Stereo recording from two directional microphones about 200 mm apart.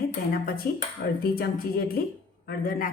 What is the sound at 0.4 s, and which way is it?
Speech, 45° left (ahead or behind).